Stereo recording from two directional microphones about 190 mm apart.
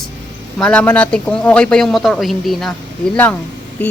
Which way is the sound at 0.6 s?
5° left (ahead or behind).